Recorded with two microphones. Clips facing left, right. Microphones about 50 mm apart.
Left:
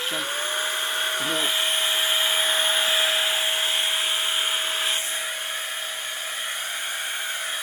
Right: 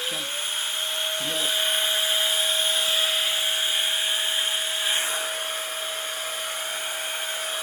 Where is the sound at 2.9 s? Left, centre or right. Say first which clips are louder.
Left 2 dB; centre.